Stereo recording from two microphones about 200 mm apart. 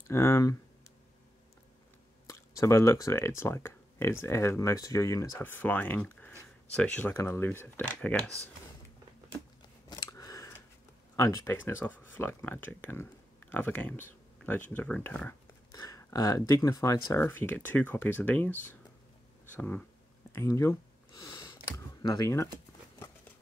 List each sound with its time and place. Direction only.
0.1 s speech: 15° left (ahead or behind)
2.2 s speech: 15° left (ahead or behind)
9.8 s scissors: 20° left (ahead or behind)
11.1 s speech: 15° left (ahead or behind)
20.3 s a sound: 15° left (ahead or behind)